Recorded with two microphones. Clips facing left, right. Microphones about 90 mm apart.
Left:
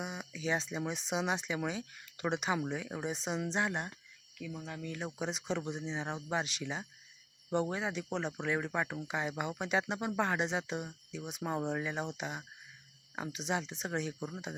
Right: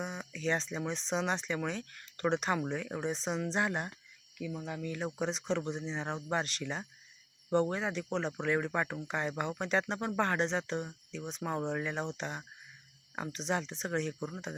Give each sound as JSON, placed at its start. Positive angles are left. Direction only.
{"t": 0.0, "sound": "speech", "side_deg": 5}